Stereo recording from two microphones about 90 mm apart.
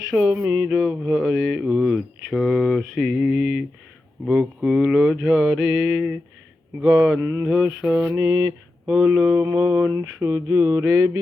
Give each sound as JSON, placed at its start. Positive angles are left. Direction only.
{"t": 0.3, "sound": "mantra", "side_deg": -20}
{"t": 0.7, "sound": "speech", "side_deg": -10}
{"t": 3.1, "sound": "mantra", "side_deg": -10}
{"t": 7.2, "sound": "mantra", "side_deg": -30}
{"t": 7.4, "sound": "mantra", "side_deg": -5}
{"t": 7.9, "sound": "mantra", "side_deg": -25}
{"t": 9.0, "sound": "mantra", "side_deg": -20}